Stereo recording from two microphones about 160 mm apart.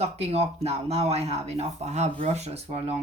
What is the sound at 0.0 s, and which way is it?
Speech, 40° right (ahead or behind).